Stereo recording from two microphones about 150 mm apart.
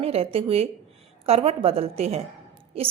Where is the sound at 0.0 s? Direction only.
40° right (ahead or behind).